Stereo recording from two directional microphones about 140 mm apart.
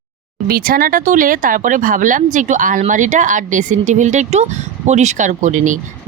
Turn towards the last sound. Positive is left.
turn(degrees=-65)  # may be behind; listen again after turning